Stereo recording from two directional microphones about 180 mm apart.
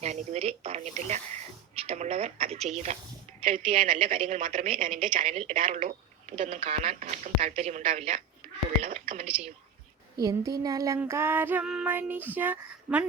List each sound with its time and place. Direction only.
0.0 s speech: 40° right (ahead or behind)
3.4 s a woman's voice: 30° right (ahead or behind)
10.2 s child singing: 20° right (ahead or behind)